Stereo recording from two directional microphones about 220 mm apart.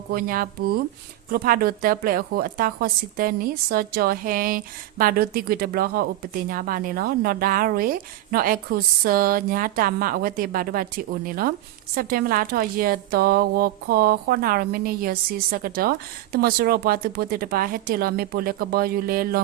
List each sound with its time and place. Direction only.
0.1 s a woman's voice: 40° right (ahead or behind)